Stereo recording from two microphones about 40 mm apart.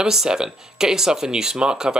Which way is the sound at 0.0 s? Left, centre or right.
Centre.